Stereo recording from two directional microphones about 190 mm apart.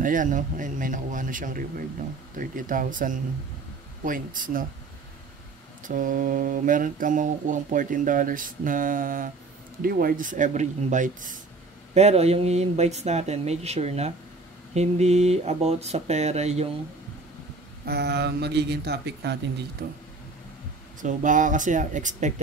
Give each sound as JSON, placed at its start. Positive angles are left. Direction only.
{"t": 0.0, "sound": "speech", "side_deg": -45}
{"t": 5.9, "sound": "speech", "side_deg": -45}
{"t": 17.8, "sound": "speech", "side_deg": -60}
{"t": 21.0, "sound": "speech", "side_deg": -40}